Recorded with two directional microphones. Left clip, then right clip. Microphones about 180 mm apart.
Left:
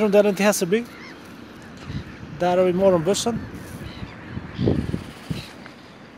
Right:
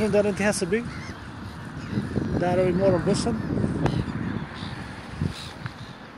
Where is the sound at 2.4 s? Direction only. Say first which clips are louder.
Left 5 dB; 20° left (ahead or behind).